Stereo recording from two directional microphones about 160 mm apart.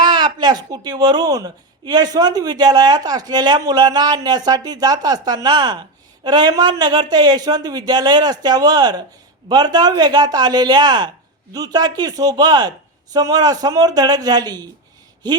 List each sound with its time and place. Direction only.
0.0 s speech: 25° right (ahead or behind)